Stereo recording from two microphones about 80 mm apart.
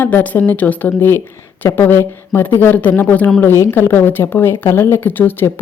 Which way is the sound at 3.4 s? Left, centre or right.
Left.